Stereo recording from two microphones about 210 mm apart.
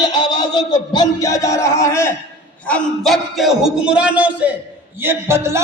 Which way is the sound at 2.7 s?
5° left (ahead or behind).